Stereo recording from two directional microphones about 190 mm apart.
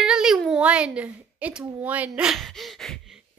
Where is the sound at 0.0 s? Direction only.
5° right (ahead or behind).